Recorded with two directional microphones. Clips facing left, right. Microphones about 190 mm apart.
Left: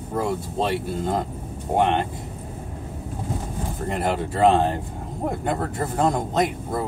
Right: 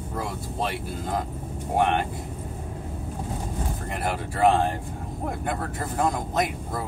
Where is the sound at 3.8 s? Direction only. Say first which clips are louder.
Left 7 dB; 25° left (ahead or behind).